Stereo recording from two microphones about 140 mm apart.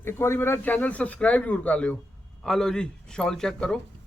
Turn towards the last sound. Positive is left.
turn(degrees=5)  # may be behind; listen again after turning